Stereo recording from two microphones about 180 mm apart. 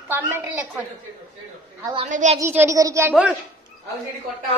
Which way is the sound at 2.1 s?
40° right (ahead or behind).